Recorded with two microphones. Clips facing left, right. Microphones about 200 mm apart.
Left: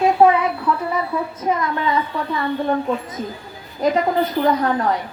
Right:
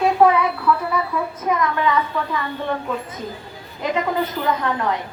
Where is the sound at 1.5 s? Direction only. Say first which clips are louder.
Right 1 dB; 30° left (ahead or behind).